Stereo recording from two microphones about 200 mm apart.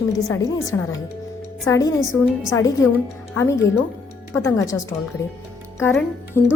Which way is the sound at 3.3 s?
15° left (ahead or behind).